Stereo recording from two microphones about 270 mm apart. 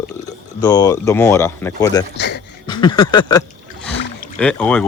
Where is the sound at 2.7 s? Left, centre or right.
Centre.